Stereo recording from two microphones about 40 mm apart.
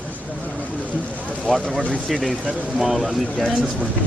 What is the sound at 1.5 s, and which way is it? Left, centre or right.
Speech, centre.